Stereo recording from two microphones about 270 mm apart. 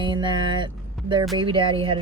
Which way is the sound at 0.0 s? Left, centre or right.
Centre.